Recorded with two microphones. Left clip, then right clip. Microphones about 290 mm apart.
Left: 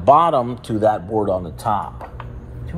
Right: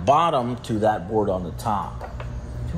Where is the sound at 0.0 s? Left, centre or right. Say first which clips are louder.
Left 5 dB; left.